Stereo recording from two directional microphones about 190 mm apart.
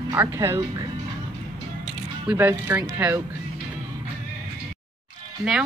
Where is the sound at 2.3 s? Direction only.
10° right (ahead or behind).